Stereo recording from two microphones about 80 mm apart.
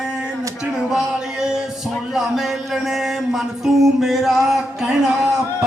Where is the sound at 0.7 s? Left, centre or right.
Centre.